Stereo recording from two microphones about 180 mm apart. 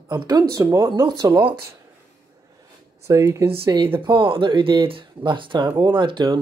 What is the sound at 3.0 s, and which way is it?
Speech, 15° right (ahead or behind).